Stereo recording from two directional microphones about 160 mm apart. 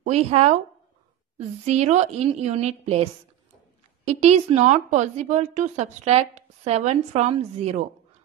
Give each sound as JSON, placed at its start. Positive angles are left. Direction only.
{"t": 0.0, "sound": "a woman's voice", "side_deg": -40}
{"t": 1.7, "sound": "a woman's voice", "side_deg": -45}